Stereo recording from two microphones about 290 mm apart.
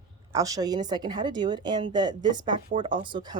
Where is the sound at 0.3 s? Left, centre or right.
Centre.